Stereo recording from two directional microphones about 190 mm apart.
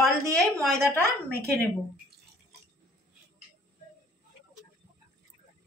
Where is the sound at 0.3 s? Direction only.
Centre (ahead or behind).